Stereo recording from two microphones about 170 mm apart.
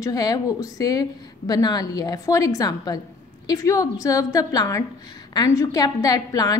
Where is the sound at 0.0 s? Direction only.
20° left (ahead or behind).